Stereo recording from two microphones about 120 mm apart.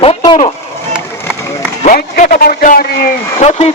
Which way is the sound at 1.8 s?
90° left.